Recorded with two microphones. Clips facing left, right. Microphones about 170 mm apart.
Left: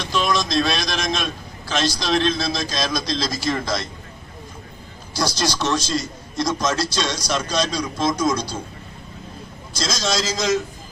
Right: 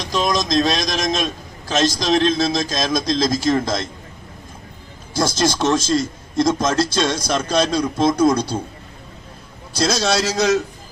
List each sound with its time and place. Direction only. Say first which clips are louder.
0.0 s a man's voice: right 2 dB; 40° right (ahead or behind)
5.1 s a man's voice: right 4 dB; 50° right (ahead or behind)
9.7 s a man's voice: right 5 dB; 65° right (ahead or behind)